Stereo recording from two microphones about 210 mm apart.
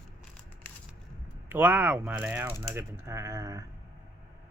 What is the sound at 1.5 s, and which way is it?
Speech, 10° right (ahead or behind).